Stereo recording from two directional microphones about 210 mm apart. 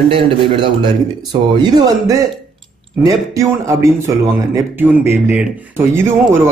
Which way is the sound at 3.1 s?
15° right (ahead or behind).